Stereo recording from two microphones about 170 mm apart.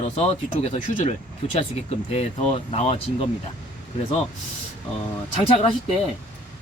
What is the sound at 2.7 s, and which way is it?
Speech, 35° left (ahead or behind).